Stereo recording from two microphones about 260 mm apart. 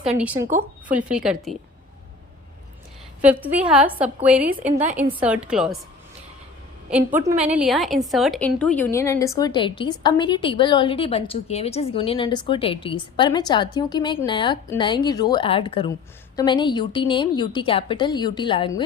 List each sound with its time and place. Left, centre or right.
0.0 s a woman's voice: centre
3.2 s a woman's voice: centre
4.7 s a woman's voice: right
5.2 s a woman's voice: centre
6.9 s a woman's voice: centre